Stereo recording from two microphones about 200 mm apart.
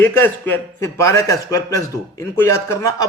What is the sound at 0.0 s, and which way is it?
A man's voice, 10° left (ahead or behind).